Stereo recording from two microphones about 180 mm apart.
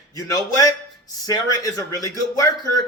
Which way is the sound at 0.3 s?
20° left (ahead or behind).